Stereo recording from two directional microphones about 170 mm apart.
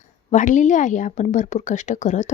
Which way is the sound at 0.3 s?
45° left (ahead or behind).